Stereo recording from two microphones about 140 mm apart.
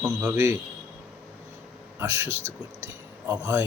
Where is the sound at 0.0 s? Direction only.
10° right (ahead or behind).